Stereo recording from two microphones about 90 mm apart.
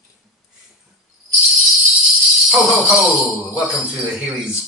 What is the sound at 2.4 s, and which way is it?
Speech, centre (ahead or behind).